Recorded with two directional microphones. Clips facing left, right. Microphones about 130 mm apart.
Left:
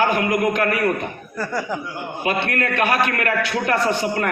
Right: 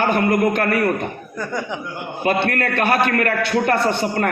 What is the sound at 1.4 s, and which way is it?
Speech, 5° left (ahead or behind).